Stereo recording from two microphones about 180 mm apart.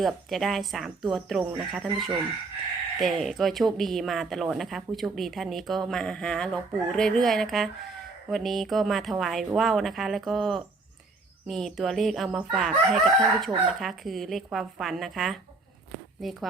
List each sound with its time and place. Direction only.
0.0 s speech: centre (ahead or behind)